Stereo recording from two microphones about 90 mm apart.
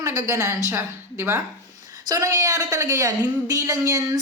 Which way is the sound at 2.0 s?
40° right (ahead or behind).